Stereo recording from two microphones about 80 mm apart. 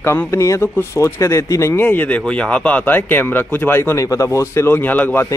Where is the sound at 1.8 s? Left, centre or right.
Left.